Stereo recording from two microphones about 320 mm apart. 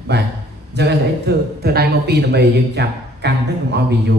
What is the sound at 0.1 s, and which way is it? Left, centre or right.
A man's voice, right.